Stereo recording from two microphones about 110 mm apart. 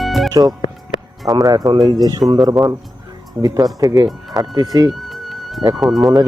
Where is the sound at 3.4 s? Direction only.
35° right (ahead or behind).